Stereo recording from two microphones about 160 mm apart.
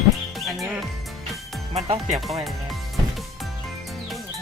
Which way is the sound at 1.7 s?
40° right (ahead or behind).